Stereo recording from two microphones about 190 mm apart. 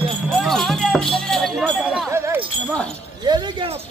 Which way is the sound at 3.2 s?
20° right (ahead or behind).